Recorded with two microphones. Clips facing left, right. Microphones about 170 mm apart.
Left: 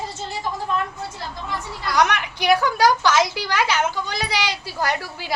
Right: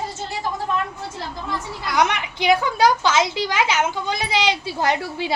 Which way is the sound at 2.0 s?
20° right (ahead or behind).